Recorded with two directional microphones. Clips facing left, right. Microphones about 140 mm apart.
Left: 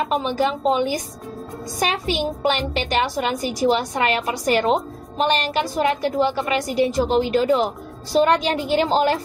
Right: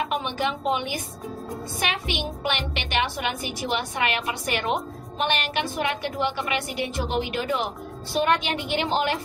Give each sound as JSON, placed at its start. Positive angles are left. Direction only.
{"t": 0.2, "sound": "a woman's voice", "side_deg": 40}
{"t": 4.6, "sound": "a woman's voice", "side_deg": 25}
{"t": 5.2, "sound": "a woman's voice", "side_deg": 40}